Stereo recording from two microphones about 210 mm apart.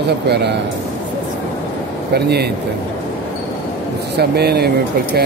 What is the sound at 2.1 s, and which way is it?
Speech, 50° right (ahead or behind).